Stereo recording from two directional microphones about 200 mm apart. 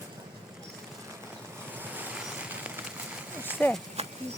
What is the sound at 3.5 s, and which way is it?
Speech, 5° left (ahead or behind).